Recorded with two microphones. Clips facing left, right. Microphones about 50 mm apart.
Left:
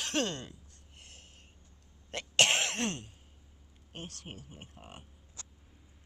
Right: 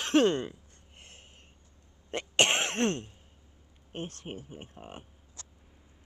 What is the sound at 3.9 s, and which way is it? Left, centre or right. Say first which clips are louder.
Speech: right 7 dB; right.